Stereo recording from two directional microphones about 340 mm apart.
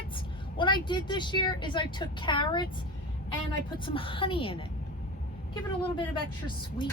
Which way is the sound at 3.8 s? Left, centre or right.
Centre.